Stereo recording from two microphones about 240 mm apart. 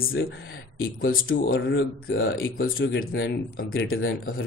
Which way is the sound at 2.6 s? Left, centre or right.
Left.